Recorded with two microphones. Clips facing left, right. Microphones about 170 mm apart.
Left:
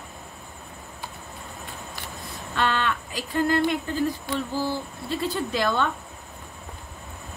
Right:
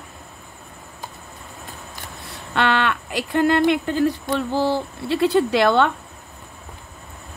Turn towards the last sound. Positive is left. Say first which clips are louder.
# right 7 dB
turn(degrees=-75)  # may be behind; listen again after turning